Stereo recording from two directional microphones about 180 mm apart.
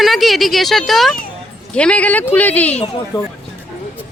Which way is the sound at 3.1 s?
25° left (ahead or behind).